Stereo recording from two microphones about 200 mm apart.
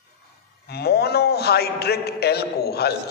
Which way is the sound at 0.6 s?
55° left (ahead or behind).